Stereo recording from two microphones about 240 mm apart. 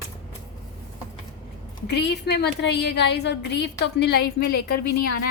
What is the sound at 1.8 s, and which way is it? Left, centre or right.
A woman's voice, left.